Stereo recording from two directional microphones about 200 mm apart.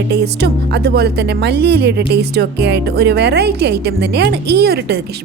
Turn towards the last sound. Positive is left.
turn(degrees=-55)  # may be behind; listen again after turning